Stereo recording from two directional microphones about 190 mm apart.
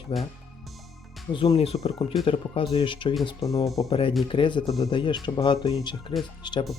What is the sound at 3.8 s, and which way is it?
Speech, 30° left (ahead or behind).